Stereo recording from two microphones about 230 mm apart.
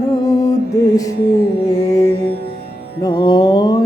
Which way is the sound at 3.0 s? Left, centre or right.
Centre.